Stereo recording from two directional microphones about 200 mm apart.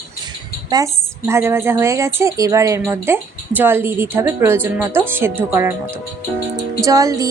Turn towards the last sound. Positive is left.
turn(degrees=-15)  # may be behind; listen again after turning